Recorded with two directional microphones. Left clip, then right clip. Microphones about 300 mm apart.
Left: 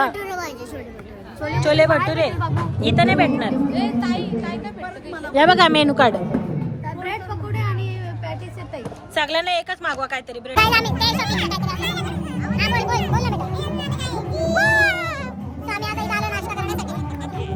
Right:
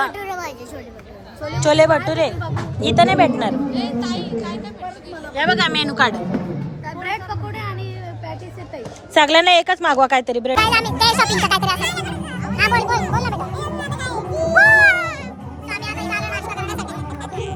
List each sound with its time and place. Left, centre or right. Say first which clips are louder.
0.0 s a sound: left 1 dB; centre
1.4 s a woman's voice: left 2 dB; left
1.6 s speech: right 2 dB; centre
3.7 s speech: left 1 dB; left
5.3 s speech: left 4 dB; centre
6.8 s music: right 4 dB; right
9.1 s a woman's voice: right 8 dB; right
10.5 s music: left 1 dB; centre
16.8 s music: right 1 dB; centre